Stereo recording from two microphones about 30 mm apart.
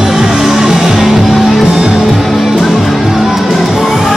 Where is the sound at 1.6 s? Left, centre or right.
Centre.